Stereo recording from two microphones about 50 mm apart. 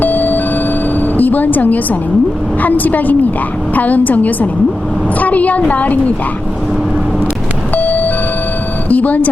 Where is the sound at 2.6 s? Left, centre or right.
Left.